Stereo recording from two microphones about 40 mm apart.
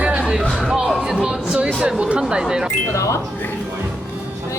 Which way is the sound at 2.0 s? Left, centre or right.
Right.